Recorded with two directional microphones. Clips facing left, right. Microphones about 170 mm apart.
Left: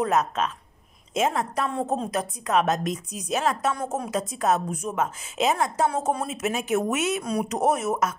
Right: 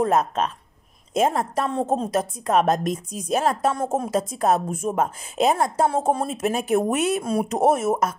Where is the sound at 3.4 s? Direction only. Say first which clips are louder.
Right 3 dB; 30° right (ahead or behind).